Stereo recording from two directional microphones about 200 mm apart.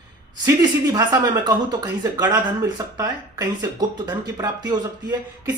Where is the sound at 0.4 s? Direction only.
20° right (ahead or behind).